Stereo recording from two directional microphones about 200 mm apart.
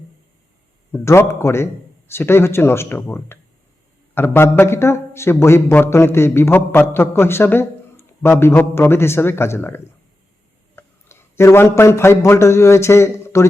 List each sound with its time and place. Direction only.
0.9 s a man's voice: 15° left (ahead or behind)